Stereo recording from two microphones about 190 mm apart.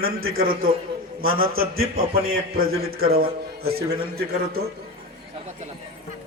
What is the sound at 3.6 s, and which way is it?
Speech, 90° right.